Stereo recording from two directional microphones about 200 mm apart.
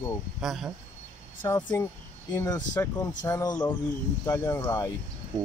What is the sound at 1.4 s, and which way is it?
Speech, 20° left (ahead or behind).